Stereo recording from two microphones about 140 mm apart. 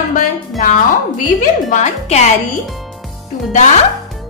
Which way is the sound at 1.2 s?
70° left (ahead or behind).